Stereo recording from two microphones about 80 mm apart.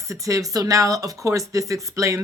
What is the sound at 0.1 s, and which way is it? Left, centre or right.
Speech, right.